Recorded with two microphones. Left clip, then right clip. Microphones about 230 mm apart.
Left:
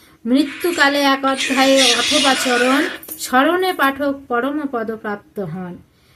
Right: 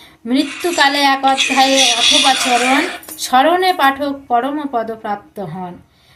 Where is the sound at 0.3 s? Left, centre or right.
Centre.